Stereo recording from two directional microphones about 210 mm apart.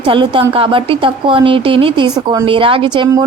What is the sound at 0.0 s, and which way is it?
Speech, 25° right (ahead or behind).